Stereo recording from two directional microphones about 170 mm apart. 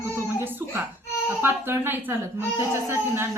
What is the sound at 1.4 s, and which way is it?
Speech, 15° right (ahead or behind).